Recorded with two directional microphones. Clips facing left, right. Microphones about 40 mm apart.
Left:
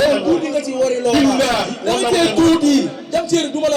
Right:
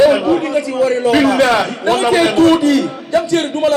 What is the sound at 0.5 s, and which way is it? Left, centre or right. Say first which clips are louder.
A man's voice: right 3 dB; right.